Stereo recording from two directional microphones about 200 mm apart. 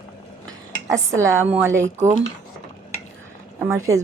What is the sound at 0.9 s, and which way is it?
Speech, 15° right (ahead or behind).